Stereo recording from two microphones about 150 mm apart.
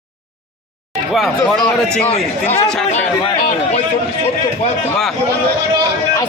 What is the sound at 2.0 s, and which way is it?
Speech, 45° left (ahead or behind).